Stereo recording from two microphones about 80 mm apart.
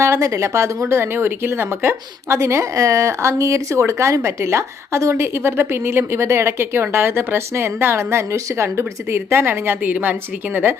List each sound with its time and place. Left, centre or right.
0.0 s a woman's voice: right